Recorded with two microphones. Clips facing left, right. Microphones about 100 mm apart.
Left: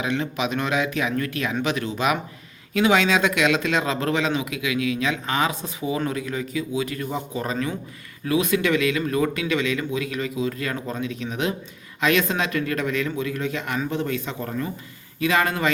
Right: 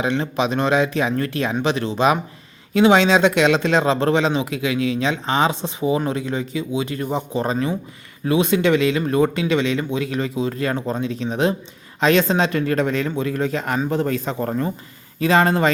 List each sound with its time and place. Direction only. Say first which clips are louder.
0.0 s a man's voice: right 4 dB; 30° right (ahead or behind)